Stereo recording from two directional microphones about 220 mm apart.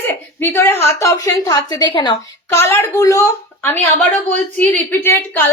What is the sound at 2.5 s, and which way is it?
Speech, 10° left (ahead or behind).